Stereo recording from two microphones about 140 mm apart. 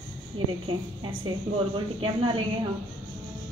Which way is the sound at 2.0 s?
40° right (ahead or behind).